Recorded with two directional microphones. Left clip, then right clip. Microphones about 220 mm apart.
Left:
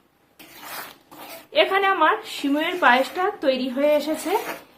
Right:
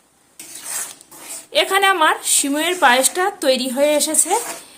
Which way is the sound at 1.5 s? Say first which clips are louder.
Right 4 dB; 50° right (ahead or behind).